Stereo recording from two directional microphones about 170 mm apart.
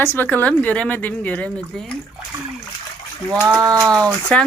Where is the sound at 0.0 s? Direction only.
10° left (ahead or behind).